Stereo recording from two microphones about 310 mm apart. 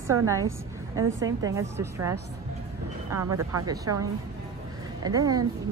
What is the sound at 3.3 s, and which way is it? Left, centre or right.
Speech, right.